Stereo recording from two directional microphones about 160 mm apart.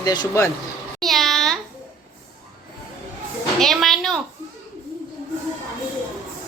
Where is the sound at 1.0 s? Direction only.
Centre (ahead or behind).